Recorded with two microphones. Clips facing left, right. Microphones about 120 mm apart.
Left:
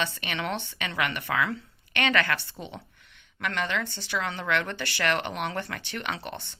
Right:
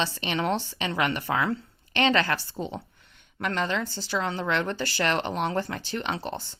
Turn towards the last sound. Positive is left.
turn(degrees=-30)  # may be behind; listen again after turning